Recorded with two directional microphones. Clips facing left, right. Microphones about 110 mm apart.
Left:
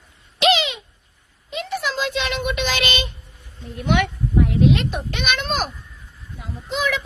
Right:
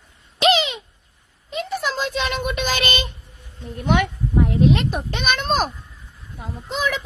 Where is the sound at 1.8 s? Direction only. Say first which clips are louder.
Left 1 dB; 45° right (ahead or behind).